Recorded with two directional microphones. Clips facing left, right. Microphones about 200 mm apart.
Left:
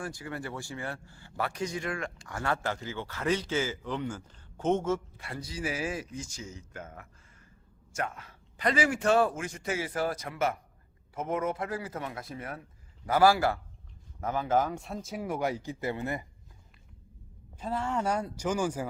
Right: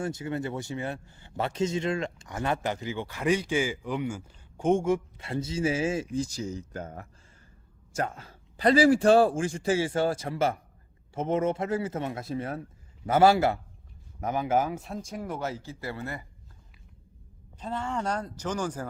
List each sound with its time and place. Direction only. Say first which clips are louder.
0.0 s a man's voice: right 6 dB; 25° right (ahead or behind)
5.1 s a man's voice: right 8 dB; 25° right (ahead or behind); by 16.2 s 20° left (ahead or behind)
17.6 s speech: left 1 dB; 5° left (ahead or behind)